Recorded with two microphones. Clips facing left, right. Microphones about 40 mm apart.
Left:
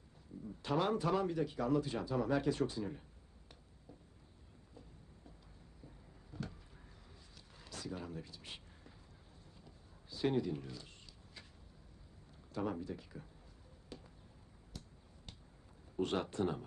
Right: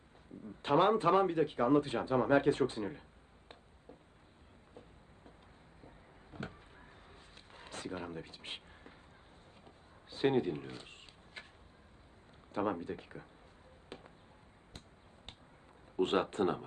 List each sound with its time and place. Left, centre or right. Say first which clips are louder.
0.6 s speech: right 7 dB; right
4.7 s train: right 3 dB; right
6.3 s a sound: right 2 dB; right
12.5 s speech: right 5 dB; right
13.9 s music: right 3 dB; right
16.0 s speech: right 5 dB; right